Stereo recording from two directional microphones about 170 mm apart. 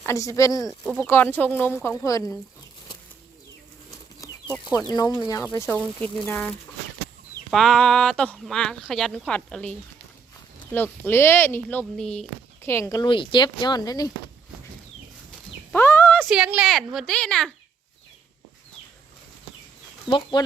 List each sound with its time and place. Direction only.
0.0 s speech: 15° left (ahead or behind)
4.2 s chicken: 20° left (ahead or behind)
4.9 s speech: 25° left (ahead or behind); by 12.2 s 5° left (ahead or behind)
12.6 s speech: 15° left (ahead or behind)
15.7 s a sound: 15° left (ahead or behind)
16.3 s speech: 5° right (ahead or behind)
20.1 s speech: 30° left (ahead or behind)